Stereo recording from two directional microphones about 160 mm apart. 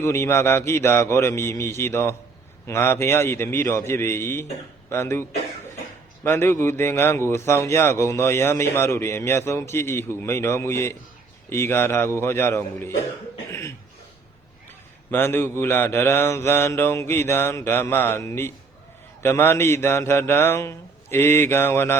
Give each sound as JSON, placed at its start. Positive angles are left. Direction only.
{"t": 0.0, "sound": "a man's voice", "side_deg": 15}
{"t": 6.2, "sound": "a man's voice", "side_deg": 15}
{"t": 15.1, "sound": "a man's voice", "side_deg": 15}